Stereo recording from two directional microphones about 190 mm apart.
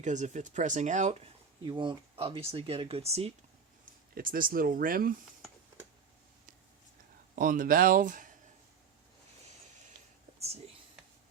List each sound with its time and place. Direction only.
0.0 s speech: 40° right (ahead or behind)
1.6 s speech: 25° right (ahead or behind)
4.1 s speech: 50° right (ahead or behind)
7.3 s speech: 45° right (ahead or behind)